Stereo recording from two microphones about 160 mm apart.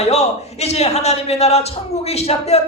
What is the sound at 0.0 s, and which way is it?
A man's voice, 40° left (ahead or behind).